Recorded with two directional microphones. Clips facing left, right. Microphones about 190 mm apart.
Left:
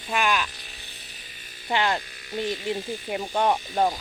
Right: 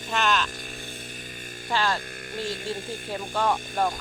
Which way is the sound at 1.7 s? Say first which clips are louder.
Left 2 dB; 20° left (ahead or behind).